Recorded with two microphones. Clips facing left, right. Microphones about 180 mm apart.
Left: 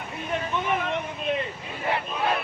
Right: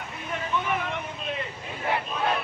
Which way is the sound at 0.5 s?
20° left (ahead or behind).